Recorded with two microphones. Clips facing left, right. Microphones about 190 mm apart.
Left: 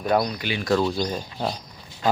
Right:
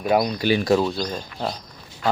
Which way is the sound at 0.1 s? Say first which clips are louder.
Right 2 dB; 15° right (ahead or behind).